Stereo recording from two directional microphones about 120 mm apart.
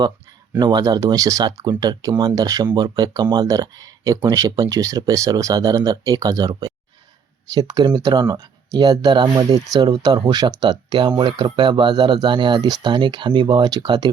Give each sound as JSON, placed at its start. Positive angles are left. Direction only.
{"t": 0.6, "sound": "speech", "side_deg": -35}